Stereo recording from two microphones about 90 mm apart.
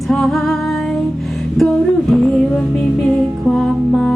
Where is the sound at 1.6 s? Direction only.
5° left (ahead or behind).